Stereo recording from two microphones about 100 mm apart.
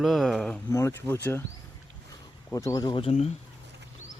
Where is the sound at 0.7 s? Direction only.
30° left (ahead or behind).